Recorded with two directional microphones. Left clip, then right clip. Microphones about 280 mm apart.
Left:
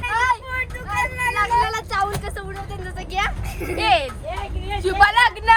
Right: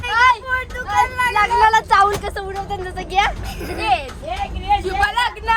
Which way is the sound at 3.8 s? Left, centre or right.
Left.